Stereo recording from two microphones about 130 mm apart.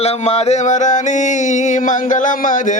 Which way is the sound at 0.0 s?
55° left (ahead or behind).